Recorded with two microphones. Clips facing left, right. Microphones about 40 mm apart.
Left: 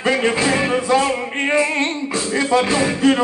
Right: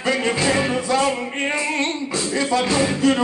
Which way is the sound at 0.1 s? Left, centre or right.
Left.